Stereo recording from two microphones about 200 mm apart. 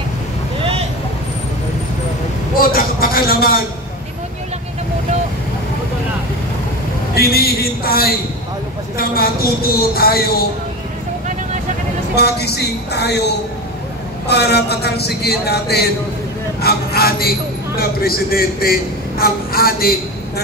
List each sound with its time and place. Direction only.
2.5 s a sound: 45° left (ahead or behind)
7.2 s a man's voice: 50° left (ahead or behind)
12.2 s a man's voice: 55° left (ahead or behind)
14.2 s a man's voice: 55° left (ahead or behind)